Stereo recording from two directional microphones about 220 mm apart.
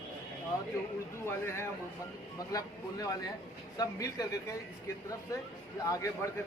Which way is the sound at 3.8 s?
15° left (ahead or behind).